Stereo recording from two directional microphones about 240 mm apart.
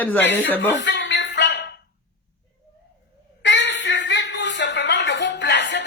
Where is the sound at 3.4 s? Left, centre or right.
Left.